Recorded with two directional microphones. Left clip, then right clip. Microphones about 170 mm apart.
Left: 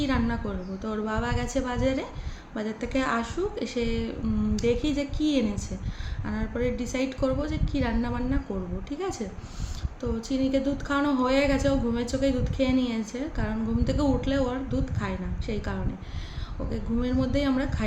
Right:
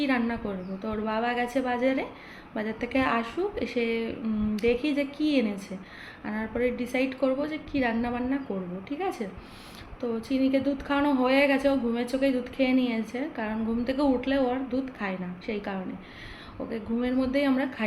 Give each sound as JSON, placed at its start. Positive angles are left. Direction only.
{"t": 0.0, "sound": "a woman's voice", "side_deg": 15}